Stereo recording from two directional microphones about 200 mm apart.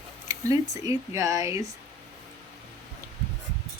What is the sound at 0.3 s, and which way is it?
Speech, 15° right (ahead or behind).